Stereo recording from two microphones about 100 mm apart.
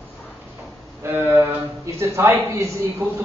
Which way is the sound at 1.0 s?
20° right (ahead or behind).